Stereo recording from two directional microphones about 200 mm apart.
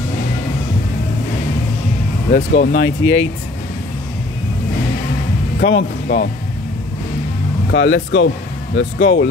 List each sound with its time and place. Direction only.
2.3 s speech: 45° left (ahead or behind)
2.7 s speech: 65° left (ahead or behind)
5.6 s speech: 55° left (ahead or behind)
7.7 s speech: 65° left (ahead or behind)